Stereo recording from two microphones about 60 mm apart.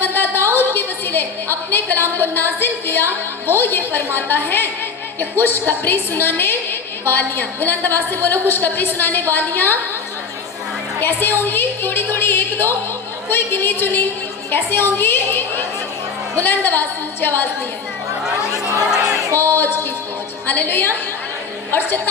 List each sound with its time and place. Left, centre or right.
0.0 s a woman's voice: left
11.0 s a woman's voice: left
19.4 s a woman's voice: left